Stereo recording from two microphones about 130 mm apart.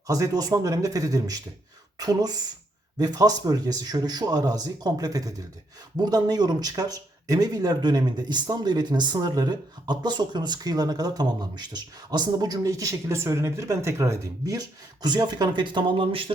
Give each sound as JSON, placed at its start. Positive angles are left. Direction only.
{"t": 0.1, "sound": "speech", "side_deg": -30}